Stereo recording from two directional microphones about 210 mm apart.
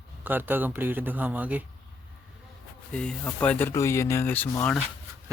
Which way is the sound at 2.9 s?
5° left (ahead or behind).